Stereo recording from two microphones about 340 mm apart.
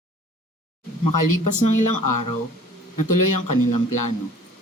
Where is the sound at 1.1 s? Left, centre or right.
Left.